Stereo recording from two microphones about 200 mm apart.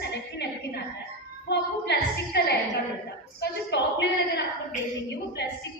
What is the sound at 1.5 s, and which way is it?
A woman's voice, 55° left (ahead or behind).